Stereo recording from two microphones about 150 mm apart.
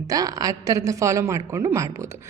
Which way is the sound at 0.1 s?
25° right (ahead or behind).